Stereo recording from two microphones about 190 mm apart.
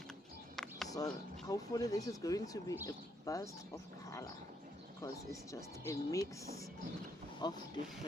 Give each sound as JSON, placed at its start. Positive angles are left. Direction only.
{"t": 0.5, "sound": "a sound", "side_deg": 0}
{"t": 0.9, "sound": "speech", "side_deg": 20}
{"t": 4.9, "sound": "speech", "side_deg": 15}